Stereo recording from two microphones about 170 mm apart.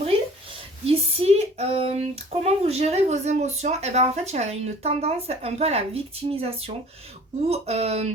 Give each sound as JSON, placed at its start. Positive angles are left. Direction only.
{"t": 0.9, "sound": "speech", "side_deg": -35}